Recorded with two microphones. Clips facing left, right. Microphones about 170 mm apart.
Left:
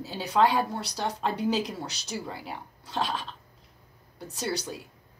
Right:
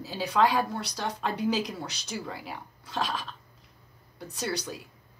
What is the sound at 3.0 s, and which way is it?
Speech, 30° left (ahead or behind).